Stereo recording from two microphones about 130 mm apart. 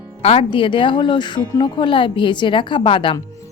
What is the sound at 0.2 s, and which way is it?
A woman's voice, 45° left (ahead or behind).